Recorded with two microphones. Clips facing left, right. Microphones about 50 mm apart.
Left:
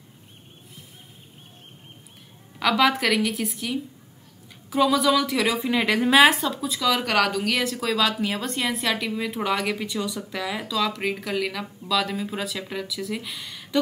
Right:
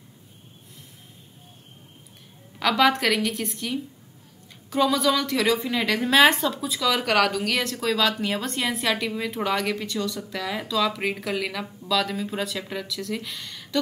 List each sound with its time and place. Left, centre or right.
2.6 s a woman's voice: centre